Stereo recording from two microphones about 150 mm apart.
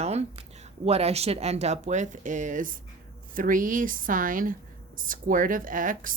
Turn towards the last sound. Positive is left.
turn(degrees=-65)  # may be behind; listen again after turning